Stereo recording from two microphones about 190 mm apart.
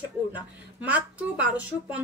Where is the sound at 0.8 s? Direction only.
5° right (ahead or behind).